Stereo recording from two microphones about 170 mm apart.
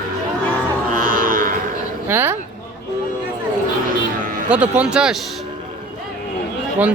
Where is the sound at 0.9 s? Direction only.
55° right (ahead or behind).